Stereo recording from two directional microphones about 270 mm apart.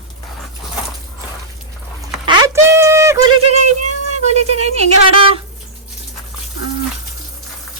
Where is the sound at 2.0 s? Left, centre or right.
Centre.